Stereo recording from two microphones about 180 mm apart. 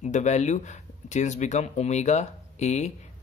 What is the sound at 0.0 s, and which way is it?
Speech, 40° left (ahead or behind).